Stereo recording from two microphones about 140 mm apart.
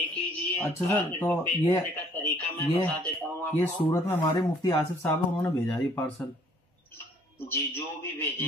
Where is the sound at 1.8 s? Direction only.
15° left (ahead or behind).